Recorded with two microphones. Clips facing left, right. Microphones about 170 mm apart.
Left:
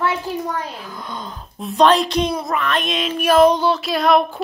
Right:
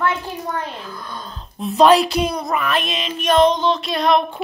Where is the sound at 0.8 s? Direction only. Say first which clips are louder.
Left 2 dB; 20° left (ahead or behind).